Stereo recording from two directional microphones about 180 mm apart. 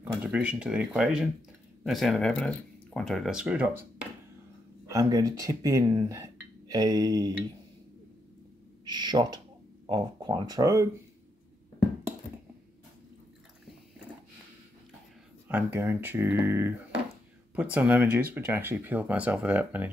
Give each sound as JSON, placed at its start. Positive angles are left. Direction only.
{"t": 0.2, "sound": "speech", "side_deg": -5}
{"t": 4.8, "sound": "speech", "side_deg": -20}
{"t": 8.9, "sound": "speech", "side_deg": -25}
{"t": 15.4, "sound": "speech", "side_deg": -10}